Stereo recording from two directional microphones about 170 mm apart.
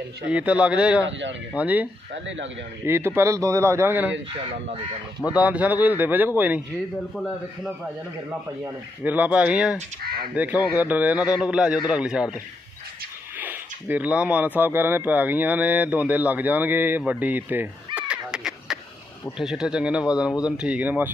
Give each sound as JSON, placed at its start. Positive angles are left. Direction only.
{"t": 0.3, "sound": "speech", "side_deg": -5}
{"t": 2.2, "sound": "speech", "side_deg": -90}
{"t": 2.9, "sound": "speech", "side_deg": -15}
{"t": 5.4, "sound": "speech", "side_deg": -10}
{"t": 9.0, "sound": "speech", "side_deg": -10}
{"t": 13.4, "sound": "speech", "side_deg": -10}
{"t": 17.9, "sound": "a sound", "side_deg": -5}
{"t": 19.3, "sound": "speech", "side_deg": -5}